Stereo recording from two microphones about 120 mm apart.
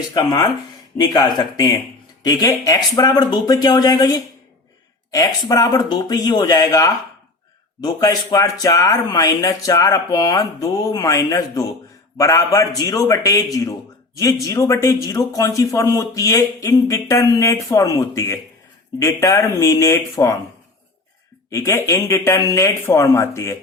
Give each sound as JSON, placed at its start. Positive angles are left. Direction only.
{"t": 0.1, "sound": "speech", "side_deg": 30}
{"t": 21.5, "sound": "speech", "side_deg": 25}